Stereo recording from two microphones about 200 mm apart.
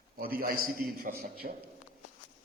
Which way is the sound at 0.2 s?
45° right (ahead or behind).